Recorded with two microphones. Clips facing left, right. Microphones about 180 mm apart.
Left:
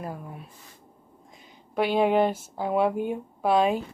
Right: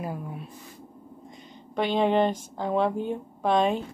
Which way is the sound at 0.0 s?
Centre (ahead or behind).